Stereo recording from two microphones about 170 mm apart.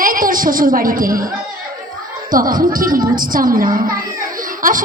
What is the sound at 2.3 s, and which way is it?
A woman's voice, 55° right (ahead or behind).